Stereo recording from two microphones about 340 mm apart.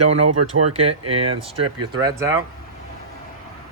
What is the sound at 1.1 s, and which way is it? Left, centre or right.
Speech, centre.